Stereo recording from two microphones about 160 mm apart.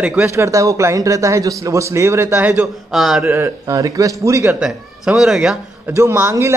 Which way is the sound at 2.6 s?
Centre (ahead or behind).